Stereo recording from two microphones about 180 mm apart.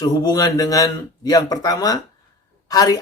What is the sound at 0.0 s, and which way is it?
Speech, 20° left (ahead or behind).